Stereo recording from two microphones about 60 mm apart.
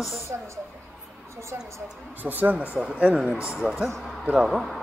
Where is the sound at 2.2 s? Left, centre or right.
Right.